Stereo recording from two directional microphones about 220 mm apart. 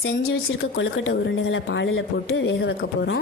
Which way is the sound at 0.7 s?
60° left (ahead or behind).